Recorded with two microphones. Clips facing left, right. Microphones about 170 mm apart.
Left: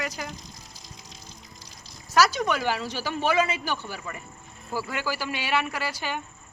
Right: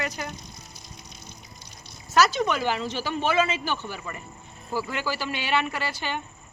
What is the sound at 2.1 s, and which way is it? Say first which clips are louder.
Speech: right 1 dB; 10° left (ahead or behind).